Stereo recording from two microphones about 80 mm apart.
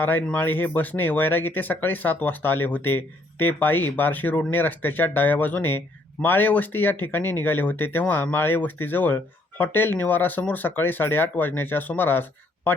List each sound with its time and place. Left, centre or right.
0.0 s speech: left